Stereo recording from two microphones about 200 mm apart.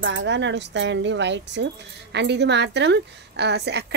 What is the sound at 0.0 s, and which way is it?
Speech, 65° right (ahead or behind).